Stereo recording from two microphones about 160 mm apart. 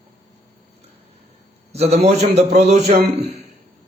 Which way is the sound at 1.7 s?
40° right (ahead or behind).